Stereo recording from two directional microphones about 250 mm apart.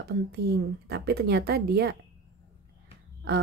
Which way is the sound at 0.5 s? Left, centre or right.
Right.